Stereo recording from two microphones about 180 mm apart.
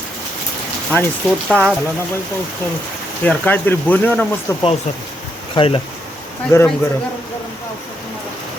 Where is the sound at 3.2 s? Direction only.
10° left (ahead or behind).